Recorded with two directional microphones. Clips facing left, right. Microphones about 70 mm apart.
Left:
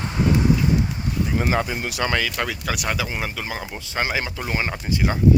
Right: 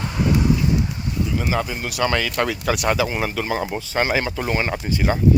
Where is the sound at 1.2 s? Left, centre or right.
Left.